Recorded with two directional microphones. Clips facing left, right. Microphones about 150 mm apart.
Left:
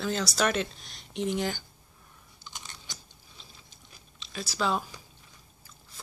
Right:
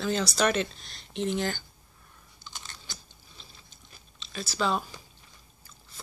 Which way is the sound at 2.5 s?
15° left (ahead or behind).